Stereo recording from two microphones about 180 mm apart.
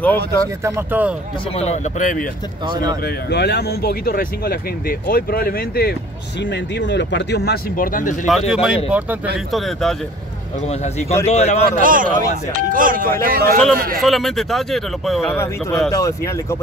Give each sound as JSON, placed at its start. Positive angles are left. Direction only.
{"t": 0.0, "sound": "speech", "side_deg": 10}
{"t": 0.7, "sound": "speech", "side_deg": -10}
{"t": 1.6, "sound": "speech", "side_deg": 40}
{"t": 2.7, "sound": "speech", "side_deg": -20}
{"t": 3.3, "sound": "speech", "side_deg": 65}
{"t": 6.8, "sound": "speech", "side_deg": 80}
{"t": 8.3, "sound": "speech", "side_deg": 0}
{"t": 10.7, "sound": "a man's voice", "side_deg": 35}
{"t": 11.8, "sound": "speech", "side_deg": -50}
{"t": 14.0, "sound": "speech", "side_deg": 0}
{"t": 15.9, "sound": "speech", "side_deg": 15}